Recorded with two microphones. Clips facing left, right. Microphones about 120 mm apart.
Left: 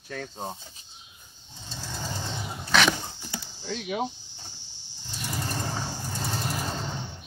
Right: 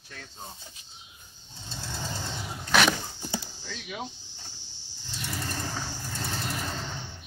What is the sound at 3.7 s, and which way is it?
Speech, 35° left (ahead or behind).